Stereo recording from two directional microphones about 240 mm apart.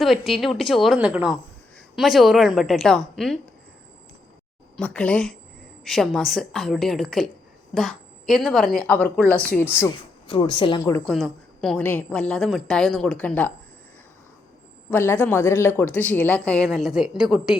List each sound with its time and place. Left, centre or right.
0.0 s a woman's voice: centre
4.8 s a woman's voice: centre
11.0 s a woman's voice: centre
14.8 s speech: centre